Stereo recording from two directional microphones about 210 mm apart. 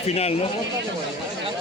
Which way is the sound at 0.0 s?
30° left (ahead or behind).